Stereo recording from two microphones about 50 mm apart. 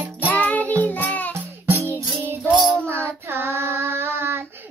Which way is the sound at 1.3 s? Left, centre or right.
Right.